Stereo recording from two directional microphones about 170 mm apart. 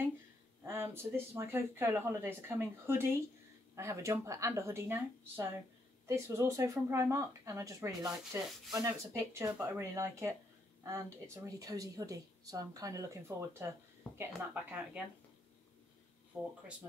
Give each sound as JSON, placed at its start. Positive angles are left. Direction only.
{"t": 0.8, "sound": "speech", "side_deg": -15}
{"t": 16.3, "sound": "speech", "side_deg": -5}